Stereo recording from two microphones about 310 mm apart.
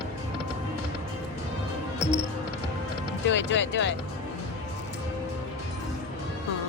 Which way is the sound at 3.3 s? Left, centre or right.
Left.